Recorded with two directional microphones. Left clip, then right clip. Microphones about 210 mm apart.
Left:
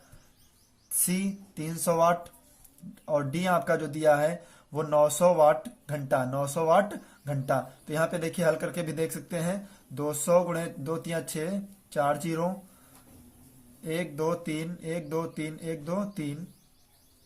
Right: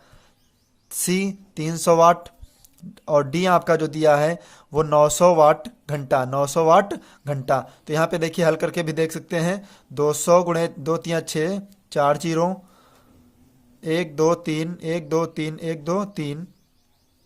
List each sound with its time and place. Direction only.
0.9 s speech: 40° right (ahead or behind)
13.8 s speech: 40° right (ahead or behind)